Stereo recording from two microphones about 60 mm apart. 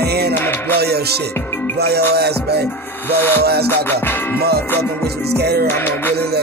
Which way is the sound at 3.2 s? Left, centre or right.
Left.